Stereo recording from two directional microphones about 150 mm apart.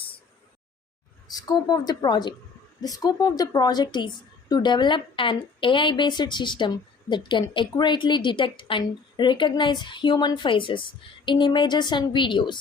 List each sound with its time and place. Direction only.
1.3 s a woman's voice: 25° left (ahead or behind)